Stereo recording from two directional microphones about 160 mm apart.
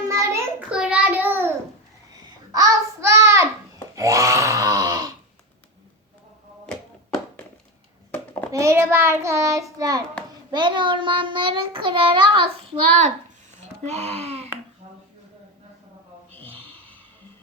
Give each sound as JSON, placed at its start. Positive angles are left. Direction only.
{"t": 0.1, "sound": "child singing", "side_deg": -20}
{"t": 0.7, "sound": "child singing", "side_deg": -5}
{"t": 3.9, "sound": "grunt", "side_deg": -20}
{"t": 8.5, "sound": "child singing", "side_deg": -15}
{"t": 13.8, "sound": "speech", "side_deg": -45}